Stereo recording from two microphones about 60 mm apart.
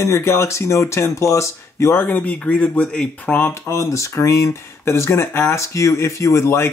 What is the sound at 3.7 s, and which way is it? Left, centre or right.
Speech, left.